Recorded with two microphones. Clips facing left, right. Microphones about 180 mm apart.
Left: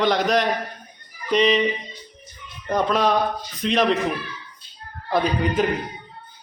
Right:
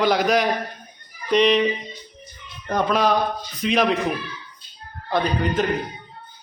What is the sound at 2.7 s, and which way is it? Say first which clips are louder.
A man's voice: even; centre (ahead or behind).